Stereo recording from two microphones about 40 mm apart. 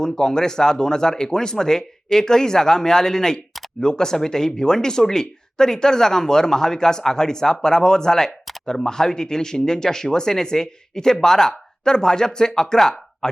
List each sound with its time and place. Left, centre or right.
0.0 s speech: centre